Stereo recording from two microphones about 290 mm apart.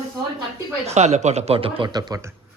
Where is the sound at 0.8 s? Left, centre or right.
Right.